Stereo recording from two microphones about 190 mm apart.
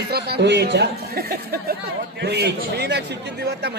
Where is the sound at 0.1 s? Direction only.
60° right (ahead or behind).